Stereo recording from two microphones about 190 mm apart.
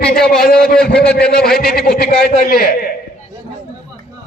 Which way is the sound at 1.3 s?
5° left (ahead or behind).